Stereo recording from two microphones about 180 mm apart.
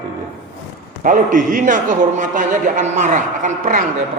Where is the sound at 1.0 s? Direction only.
45° right (ahead or behind).